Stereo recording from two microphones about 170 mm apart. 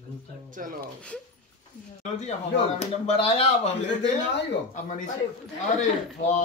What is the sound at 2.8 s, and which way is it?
Speech, 40° left (ahead or behind).